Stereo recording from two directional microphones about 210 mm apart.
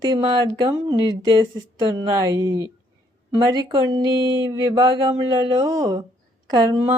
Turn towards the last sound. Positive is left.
turn(degrees=-20)  # may be behind; listen again after turning